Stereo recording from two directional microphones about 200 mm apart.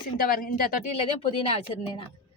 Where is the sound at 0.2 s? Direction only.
45° left (ahead or behind).